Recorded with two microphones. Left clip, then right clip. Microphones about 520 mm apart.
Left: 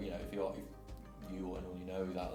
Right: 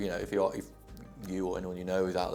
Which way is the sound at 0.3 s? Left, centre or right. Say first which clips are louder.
Right 11 dB; right.